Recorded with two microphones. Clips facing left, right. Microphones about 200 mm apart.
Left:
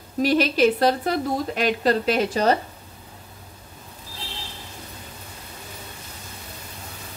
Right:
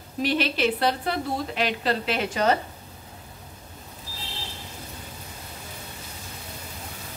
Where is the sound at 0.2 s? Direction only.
40° left (ahead or behind).